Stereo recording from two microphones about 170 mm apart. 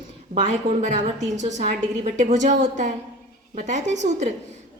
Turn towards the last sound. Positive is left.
turn(degrees=-45)  # may be behind; listen again after turning